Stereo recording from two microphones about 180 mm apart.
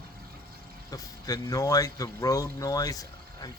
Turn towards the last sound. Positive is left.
turn(degrees=20)  # may be behind; listen again after turning